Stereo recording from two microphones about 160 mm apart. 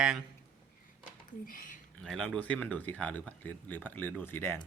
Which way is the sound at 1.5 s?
60° left (ahead or behind).